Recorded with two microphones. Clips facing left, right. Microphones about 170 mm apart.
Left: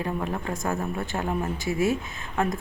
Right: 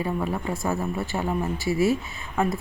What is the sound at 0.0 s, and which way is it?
A woman's voice, 5° right (ahead or behind).